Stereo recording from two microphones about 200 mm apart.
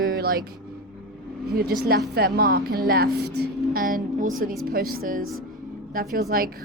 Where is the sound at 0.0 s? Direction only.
50° right (ahead or behind).